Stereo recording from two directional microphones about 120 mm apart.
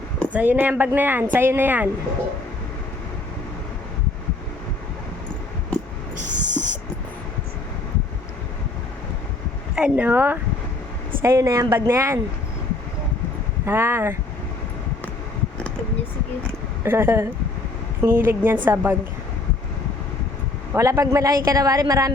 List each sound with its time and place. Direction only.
0.3 s a woman's voice: 15° right (ahead or behind)
6.2 s owl: 90° right
9.7 s a woman's voice: 10° right (ahead or behind)
13.7 s a woman's voice: 20° right (ahead or behind)
16.8 s a woman's voice: 20° right (ahead or behind)
20.7 s a woman's voice: 25° right (ahead or behind)